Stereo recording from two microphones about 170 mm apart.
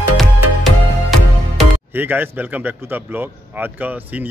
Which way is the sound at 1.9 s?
10° right (ahead or behind).